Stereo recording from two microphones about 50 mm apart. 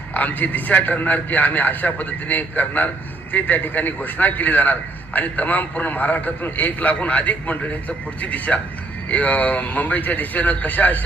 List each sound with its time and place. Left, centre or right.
0.1 s a man's voice: left